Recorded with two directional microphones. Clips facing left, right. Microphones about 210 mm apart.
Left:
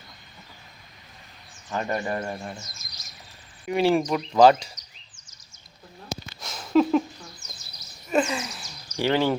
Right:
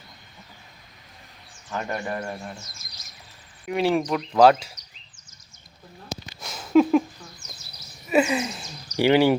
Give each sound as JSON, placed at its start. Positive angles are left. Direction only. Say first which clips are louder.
{"t": 1.7, "sound": "speech", "louder": "left 2 dB", "side_deg": 5}
{"t": 3.7, "sound": "speech", "louder": "left 1 dB", "side_deg": 0}
{"t": 6.2, "sound": "a sound", "louder": "right 1 dB", "side_deg": -5}
{"t": 8.1, "sound": "a sound", "louder": "right 3 dB", "side_deg": -10}
{"t": 8.4, "sound": "speech", "louder": "right 6 dB", "side_deg": -25}
{"t": 9.0, "sound": "speech", "louder": "right 5 dB", "side_deg": -15}